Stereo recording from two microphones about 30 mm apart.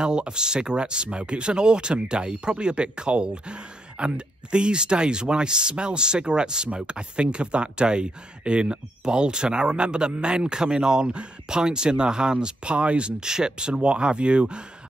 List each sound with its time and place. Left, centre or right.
0.0 s speech: right
12.7 s speech: right
13.2 s speech: right